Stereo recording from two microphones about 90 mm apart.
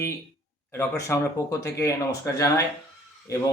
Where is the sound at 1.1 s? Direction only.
30° left (ahead or behind).